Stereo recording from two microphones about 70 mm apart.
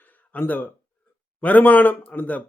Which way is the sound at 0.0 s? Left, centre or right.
Left.